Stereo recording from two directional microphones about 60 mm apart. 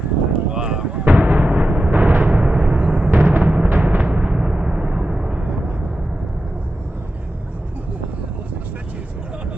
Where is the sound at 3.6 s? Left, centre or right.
Right; by 6.3 s centre.